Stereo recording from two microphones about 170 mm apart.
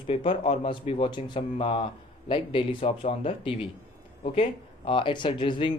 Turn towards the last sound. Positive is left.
turn(degrees=30)  # may be behind; listen again after turning